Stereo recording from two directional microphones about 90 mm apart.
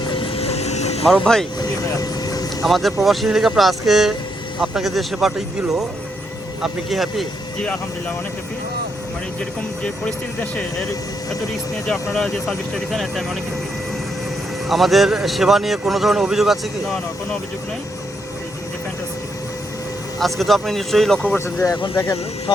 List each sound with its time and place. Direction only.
0.1 s vehicle: 75° left (ahead or behind)
1.0 s speech: 5° left (ahead or behind)
1.8 s vehicle: 45° left (ahead or behind)
2.6 s speech: centre (ahead or behind)
11.9 s speech: 5° left (ahead or behind)
14.7 s speech: centre (ahead or behind)
20.1 s speech: centre (ahead or behind)
21.3 s speech: 35° left (ahead or behind)
22.5 s speech: 60° left (ahead or behind)